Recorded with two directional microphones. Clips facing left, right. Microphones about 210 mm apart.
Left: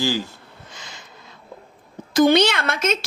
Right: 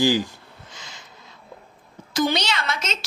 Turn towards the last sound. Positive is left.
turn(degrees=55)  # may be behind; listen again after turning